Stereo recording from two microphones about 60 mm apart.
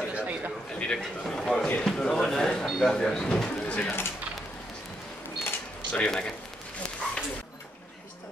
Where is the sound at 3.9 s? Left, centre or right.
Left.